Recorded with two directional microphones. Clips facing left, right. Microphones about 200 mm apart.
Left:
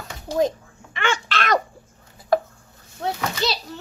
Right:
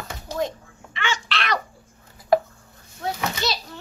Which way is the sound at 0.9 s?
50° left (ahead or behind).